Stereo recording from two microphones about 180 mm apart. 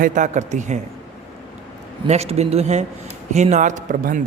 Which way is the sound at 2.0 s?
35° right (ahead or behind).